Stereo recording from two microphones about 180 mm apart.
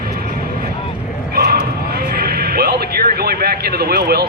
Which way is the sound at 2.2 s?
60° right (ahead or behind).